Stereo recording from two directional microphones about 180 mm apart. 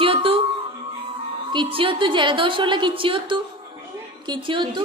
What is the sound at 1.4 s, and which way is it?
A woman's voice, 25° right (ahead or behind).